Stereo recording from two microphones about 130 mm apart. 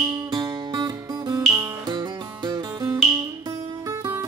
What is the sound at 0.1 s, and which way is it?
Music, 30° right (ahead or behind).